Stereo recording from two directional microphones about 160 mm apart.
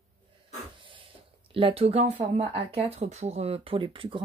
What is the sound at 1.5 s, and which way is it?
Speech, 35° right (ahead or behind).